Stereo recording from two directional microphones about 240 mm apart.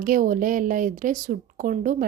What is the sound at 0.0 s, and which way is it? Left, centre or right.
A woman's voice, right.